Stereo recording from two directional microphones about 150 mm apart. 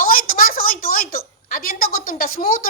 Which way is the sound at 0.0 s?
70° left (ahead or behind).